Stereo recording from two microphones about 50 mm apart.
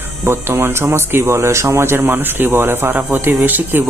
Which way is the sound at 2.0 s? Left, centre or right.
Right.